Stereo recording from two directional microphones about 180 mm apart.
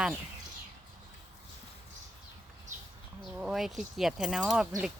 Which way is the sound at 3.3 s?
5° right (ahead or behind).